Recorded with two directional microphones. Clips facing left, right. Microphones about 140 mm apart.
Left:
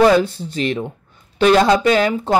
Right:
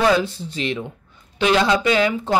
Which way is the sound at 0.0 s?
45° left (ahead or behind).